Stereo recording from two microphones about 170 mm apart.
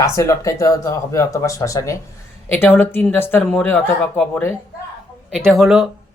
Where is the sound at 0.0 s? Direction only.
15° left (ahead or behind).